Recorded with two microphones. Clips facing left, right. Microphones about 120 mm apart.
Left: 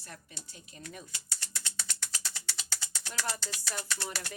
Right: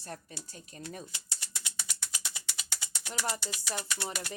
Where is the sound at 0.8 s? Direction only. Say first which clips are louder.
Right 3 dB; 30° right (ahead or behind).